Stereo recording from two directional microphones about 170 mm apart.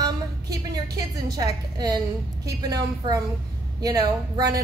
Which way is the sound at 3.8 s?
20° right (ahead or behind).